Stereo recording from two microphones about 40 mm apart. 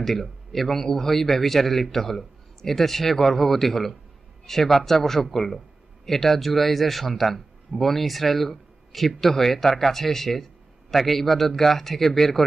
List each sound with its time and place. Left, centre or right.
0.0 s a man's voice: centre